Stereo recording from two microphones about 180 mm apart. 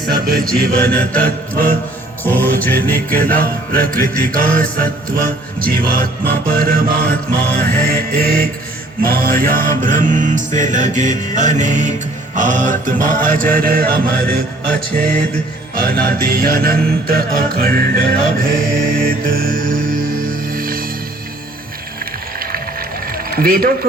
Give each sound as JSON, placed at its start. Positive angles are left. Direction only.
{"t": 0.1, "sound": "music", "side_deg": -55}
{"t": 0.9, "sound": "music", "side_deg": 5}
{"t": 3.4, "sound": "music", "side_deg": -55}
{"t": 23.1, "sound": "a sound", "side_deg": -55}